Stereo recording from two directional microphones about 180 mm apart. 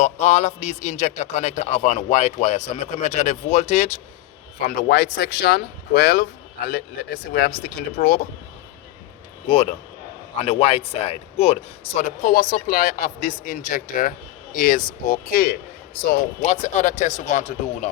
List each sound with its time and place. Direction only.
0.0 s a man's voice: 35° left (ahead or behind)
4.6 s speech: 50° left (ahead or behind)
9.5 s a man's voice: 30° left (ahead or behind); by 15.5 s 55° left (ahead or behind)
16.0 s a man's voice: 40° left (ahead or behind)